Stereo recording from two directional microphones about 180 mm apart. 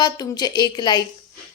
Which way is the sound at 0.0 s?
20° left (ahead or behind).